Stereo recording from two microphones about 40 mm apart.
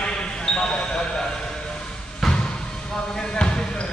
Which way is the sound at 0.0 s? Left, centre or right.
Left.